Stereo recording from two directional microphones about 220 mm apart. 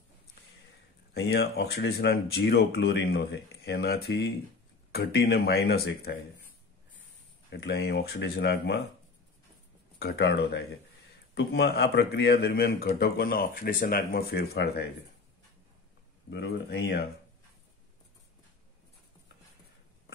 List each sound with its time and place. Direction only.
1.1 s speech: 45° left (ahead or behind)
7.4 s speech: 45° left (ahead or behind)
9.9 s speech: 45° left (ahead or behind)
16.3 s speech: 55° left (ahead or behind)